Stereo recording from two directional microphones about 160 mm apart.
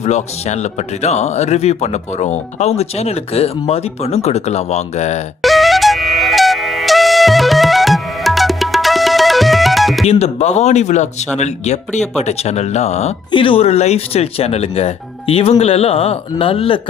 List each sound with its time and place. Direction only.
0.0 s speech: 45° left (ahead or behind)
5.4 s music: centre (ahead or behind)
10.1 s speech: 40° left (ahead or behind)